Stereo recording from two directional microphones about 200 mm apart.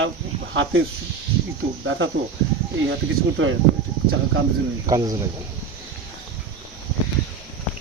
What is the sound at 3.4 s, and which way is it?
Speech, 70° right (ahead or behind).